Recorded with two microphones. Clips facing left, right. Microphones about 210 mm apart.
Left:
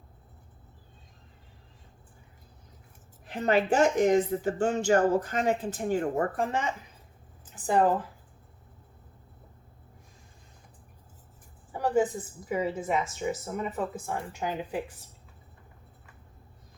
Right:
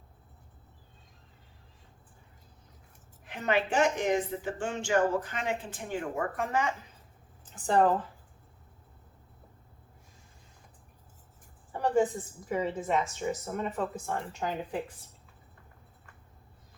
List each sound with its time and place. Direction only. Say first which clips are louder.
3.2 s a woman's voice: left 4 dB; 35° left (ahead or behind)
7.7 s speech: left 1 dB; 5° left (ahead or behind)
11.7 s a sound: left 1 dB; 5° left (ahead or behind)
12.5 s speech: left 1 dB; 10° left (ahead or behind)